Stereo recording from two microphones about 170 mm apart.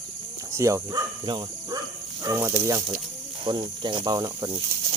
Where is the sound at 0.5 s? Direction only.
20° right (ahead or behind).